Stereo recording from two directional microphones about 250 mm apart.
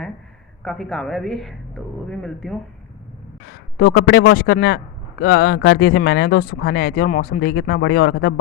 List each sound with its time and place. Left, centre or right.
0.6 s a woman's voice: centre
3.4 s a man's voice: left